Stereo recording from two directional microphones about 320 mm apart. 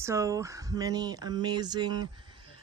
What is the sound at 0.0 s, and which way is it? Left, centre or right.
Speech, centre.